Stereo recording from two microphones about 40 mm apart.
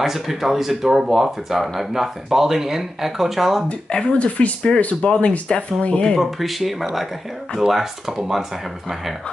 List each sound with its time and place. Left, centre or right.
0.0 s speech: centre
3.6 s speech: left
5.1 s speech: left
6.1 s speech: centre